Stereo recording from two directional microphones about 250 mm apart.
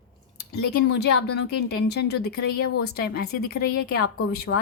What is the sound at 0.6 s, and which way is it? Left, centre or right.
Speech, left.